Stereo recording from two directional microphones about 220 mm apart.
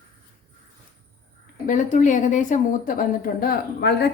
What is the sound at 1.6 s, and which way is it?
A woman's voice, 35° left (ahead or behind).